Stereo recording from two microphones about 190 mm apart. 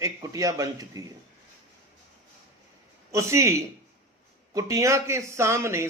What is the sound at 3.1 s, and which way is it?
Speech, 15° right (ahead or behind).